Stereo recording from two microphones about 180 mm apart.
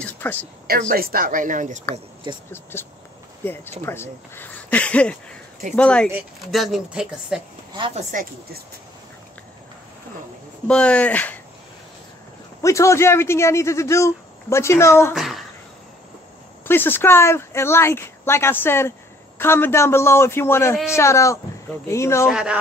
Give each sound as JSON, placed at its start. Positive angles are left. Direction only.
{"t": 0.0, "sound": "a sound", "side_deg": 10}
{"t": 0.7, "sound": "speech", "side_deg": -55}
{"t": 2.5, "sound": "speech", "side_deg": 10}
{"t": 7.7, "sound": "speech", "side_deg": -25}
{"t": 8.1, "sound": "speech", "side_deg": -50}
{"t": 10.7, "sound": "speech", "side_deg": 5}
{"t": 12.6, "sound": "speech", "side_deg": 15}
{"t": 15.1, "sound": "a sound", "side_deg": 0}
{"t": 16.6, "sound": "speech", "side_deg": 10}
{"t": 22.3, "sound": "speech", "side_deg": -5}